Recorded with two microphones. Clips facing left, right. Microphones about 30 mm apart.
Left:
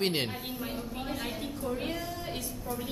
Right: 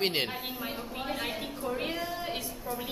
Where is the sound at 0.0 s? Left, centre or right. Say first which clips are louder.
Right 1 dB; centre.